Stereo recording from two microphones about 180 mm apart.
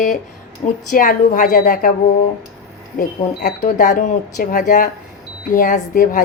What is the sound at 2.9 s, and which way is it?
Speech, 65° left (ahead or behind).